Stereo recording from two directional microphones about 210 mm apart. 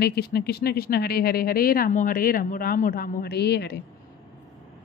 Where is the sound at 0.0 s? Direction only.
50° left (ahead or behind).